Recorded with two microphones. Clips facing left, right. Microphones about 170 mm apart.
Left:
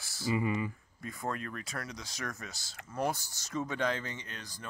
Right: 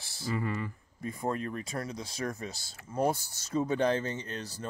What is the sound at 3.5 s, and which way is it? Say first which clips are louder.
Speech: right 5 dB; 30° right (ahead or behind).